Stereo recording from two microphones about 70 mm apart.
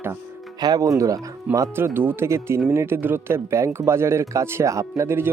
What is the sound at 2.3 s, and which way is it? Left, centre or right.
Speech, right.